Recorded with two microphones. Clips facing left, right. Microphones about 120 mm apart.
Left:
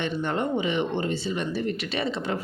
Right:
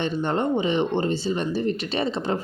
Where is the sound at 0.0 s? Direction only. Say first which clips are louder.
Right 3 dB; 30° right (ahead or behind).